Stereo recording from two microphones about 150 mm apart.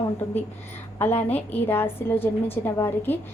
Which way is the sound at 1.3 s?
15° left (ahead or behind).